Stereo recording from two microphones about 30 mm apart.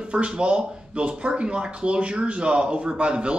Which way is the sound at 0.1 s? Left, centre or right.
Right.